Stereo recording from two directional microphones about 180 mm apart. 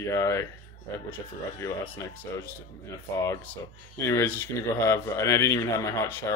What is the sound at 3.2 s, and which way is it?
Speech, 15° left (ahead or behind).